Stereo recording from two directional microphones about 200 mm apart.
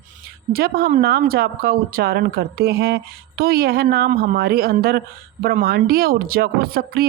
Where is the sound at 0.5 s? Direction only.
50° right (ahead or behind).